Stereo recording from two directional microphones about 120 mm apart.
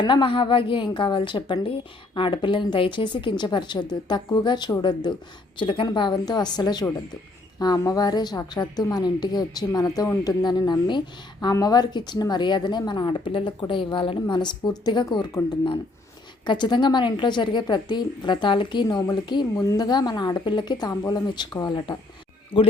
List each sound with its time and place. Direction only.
0.0 s a woman's voice: 40° left (ahead or behind)
15.3 s speech: 25° left (ahead or behind)
16.5 s a woman's voice: 40° left (ahead or behind)